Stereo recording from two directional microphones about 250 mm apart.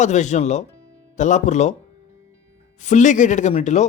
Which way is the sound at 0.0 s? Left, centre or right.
Left.